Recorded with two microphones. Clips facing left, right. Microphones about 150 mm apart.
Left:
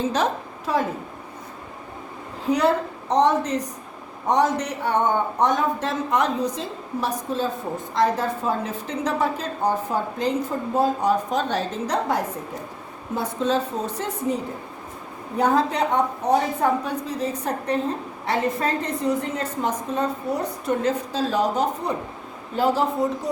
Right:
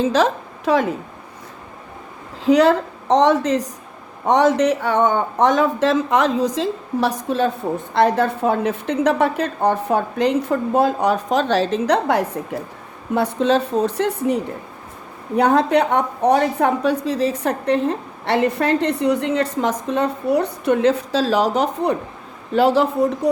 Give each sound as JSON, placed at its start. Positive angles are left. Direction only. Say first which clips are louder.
{"t": 0.0, "sound": "a woman's voice", "louder": "right 6 dB", "side_deg": -90}
{"t": 2.4, "sound": "a woman's voice", "louder": "right 6 dB", "side_deg": -90}
{"t": 15.4, "sound": "a woman's voice", "louder": "right 5 dB", "side_deg": -65}